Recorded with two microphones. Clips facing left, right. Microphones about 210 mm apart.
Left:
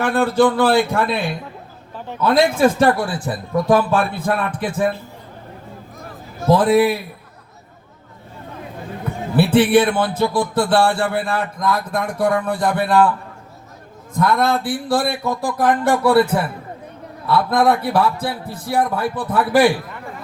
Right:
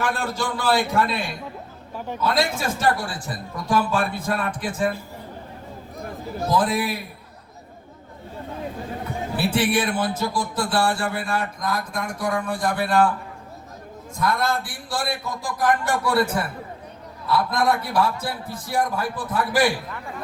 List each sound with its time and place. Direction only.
0.0 s speech: 55° left (ahead or behind)
6.5 s speech: 60° left (ahead or behind)
9.3 s speech: 60° left (ahead or behind)
14.2 s speech: 60° left (ahead or behind)